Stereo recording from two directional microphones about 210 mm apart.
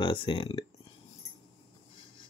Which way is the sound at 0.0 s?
25° left (ahead or behind).